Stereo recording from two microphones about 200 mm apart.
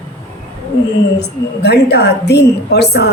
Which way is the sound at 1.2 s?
55° left (ahead or behind).